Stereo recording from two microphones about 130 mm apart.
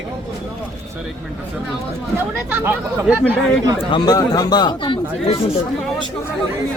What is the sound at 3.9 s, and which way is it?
Speech, 35° left (ahead or behind).